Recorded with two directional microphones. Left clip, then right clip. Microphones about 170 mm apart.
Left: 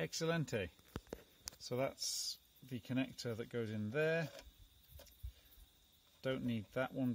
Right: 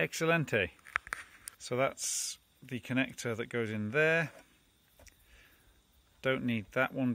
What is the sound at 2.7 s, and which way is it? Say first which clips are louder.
Speech: right 8 dB; 10° right (ahead or behind).